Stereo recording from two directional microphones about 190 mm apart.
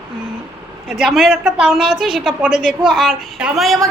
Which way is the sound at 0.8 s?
Centre (ahead or behind).